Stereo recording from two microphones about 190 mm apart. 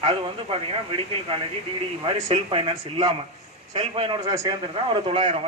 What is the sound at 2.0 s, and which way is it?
Speech, 30° right (ahead or behind).